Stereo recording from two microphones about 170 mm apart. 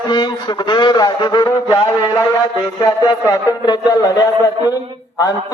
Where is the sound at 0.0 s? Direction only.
25° left (ahead or behind).